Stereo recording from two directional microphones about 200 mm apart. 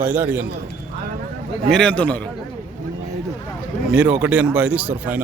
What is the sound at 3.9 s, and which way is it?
Speech, 5° right (ahead or behind).